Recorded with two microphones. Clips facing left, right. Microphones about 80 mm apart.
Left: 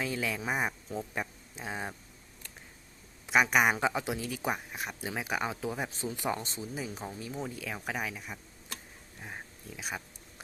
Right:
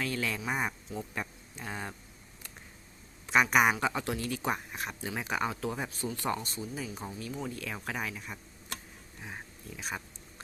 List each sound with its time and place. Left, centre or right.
0.0 s speech: centre
3.2 s speech: centre
3.8 s speech: centre
5.9 s speech: left; by 8.4 s centre
9.2 s a sound: centre